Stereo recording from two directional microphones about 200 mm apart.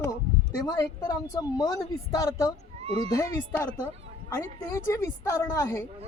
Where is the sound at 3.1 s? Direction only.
15° left (ahead or behind).